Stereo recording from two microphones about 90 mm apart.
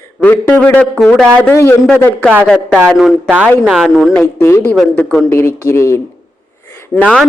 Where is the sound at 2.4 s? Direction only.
5° left (ahead or behind).